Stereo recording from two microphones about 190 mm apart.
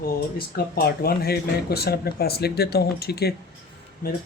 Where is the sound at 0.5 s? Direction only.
55° left (ahead or behind).